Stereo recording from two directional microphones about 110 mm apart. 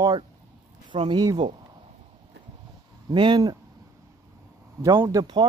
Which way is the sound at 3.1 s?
45° right (ahead or behind).